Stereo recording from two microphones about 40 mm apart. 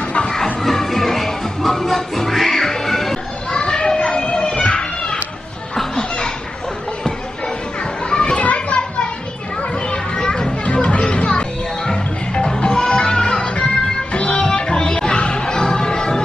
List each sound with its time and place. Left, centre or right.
0.6 s music: centre
3.5 s children playing: left
8.1 s children playing: centre
8.4 s children playing: left
10.1 s children playing: centre
10.6 s music: left